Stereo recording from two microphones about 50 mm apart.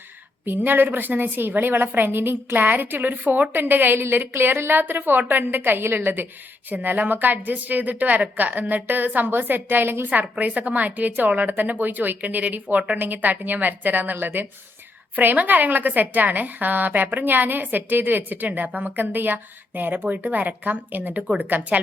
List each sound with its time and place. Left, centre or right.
0.4 s a woman's voice: right
10.1 s a woman's voice: right